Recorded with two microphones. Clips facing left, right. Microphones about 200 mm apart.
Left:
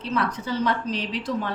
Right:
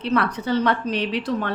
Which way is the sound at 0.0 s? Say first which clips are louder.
Right 4 dB; 65° right (ahead or behind).